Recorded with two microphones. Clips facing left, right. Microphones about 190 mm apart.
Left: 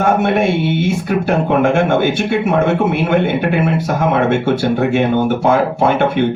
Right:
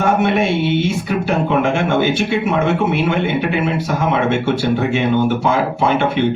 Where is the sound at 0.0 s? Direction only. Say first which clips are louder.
Left 2 dB; 50° left (ahead or behind).